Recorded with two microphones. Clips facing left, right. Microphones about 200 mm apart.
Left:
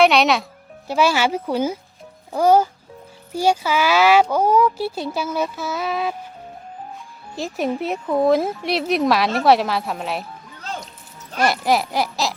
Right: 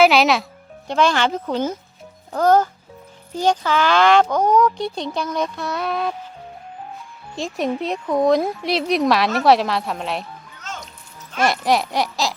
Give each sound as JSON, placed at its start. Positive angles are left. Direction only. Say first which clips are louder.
{"t": 0.0, "sound": "speech", "louder": "right 1 dB", "side_deg": 0}
{"t": 7.3, "sound": "speech", "louder": "even", "side_deg": 5}
{"t": 10.7, "sound": "music", "louder": "left 3 dB", "side_deg": 35}
{"t": 11.3, "sound": "speech", "louder": "even", "side_deg": 0}